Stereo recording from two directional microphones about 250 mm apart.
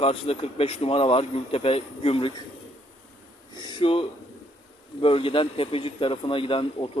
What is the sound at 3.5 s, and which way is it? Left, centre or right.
A man's voice, centre.